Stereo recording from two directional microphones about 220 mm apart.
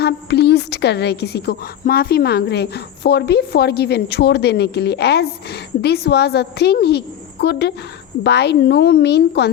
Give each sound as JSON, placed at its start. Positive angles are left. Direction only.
{"t": 0.0, "sound": "a woman's voice", "side_deg": 50}